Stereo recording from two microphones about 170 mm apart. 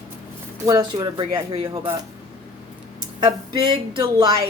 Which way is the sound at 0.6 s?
20° right (ahead or behind).